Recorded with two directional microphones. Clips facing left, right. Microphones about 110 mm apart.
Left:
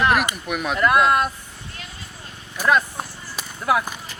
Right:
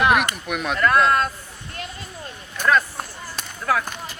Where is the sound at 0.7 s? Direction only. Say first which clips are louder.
Left 1 dB; 15° left (ahead or behind).